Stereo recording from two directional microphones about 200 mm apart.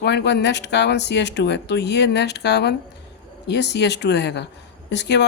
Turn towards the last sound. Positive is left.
turn(degrees=60)  # may be behind; listen again after turning